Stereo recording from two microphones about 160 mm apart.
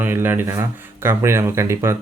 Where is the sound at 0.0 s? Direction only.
15° right (ahead or behind).